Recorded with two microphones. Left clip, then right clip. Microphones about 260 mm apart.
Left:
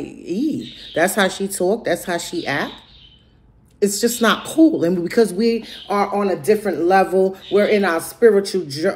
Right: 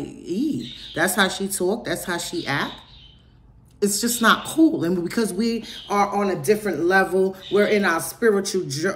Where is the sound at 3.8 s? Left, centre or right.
Centre.